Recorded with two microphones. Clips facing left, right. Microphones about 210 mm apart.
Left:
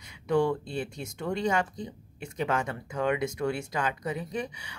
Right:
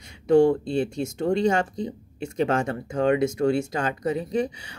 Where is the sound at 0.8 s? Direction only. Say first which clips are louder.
Right 11 dB; 25° right (ahead or behind).